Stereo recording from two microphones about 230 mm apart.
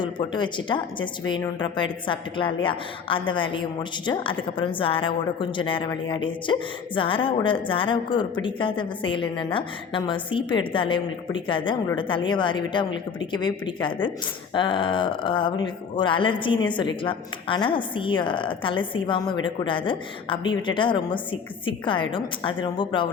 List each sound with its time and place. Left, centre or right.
0.0 s a woman's voice: centre